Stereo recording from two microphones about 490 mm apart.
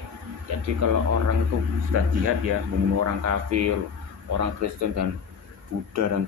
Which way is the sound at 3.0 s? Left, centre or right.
Right.